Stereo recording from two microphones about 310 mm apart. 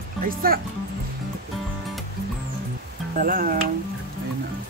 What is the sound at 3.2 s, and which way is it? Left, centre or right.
Speech, right.